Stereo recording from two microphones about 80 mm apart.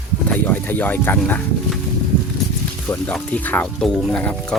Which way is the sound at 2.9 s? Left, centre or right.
Centre.